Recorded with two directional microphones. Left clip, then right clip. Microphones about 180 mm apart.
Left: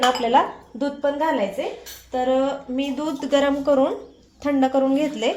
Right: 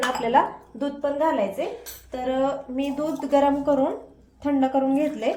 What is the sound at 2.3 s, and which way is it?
Speech, 30° left (ahead or behind).